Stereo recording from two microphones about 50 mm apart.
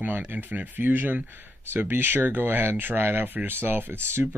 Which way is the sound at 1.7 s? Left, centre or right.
Right.